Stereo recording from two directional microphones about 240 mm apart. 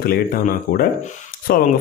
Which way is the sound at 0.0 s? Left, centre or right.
Left.